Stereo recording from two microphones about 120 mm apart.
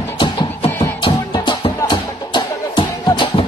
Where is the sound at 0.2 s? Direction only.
45° left (ahead or behind).